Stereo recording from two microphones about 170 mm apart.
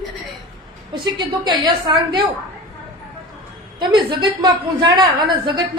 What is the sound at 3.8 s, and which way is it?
A woman's voice, 25° right (ahead or behind).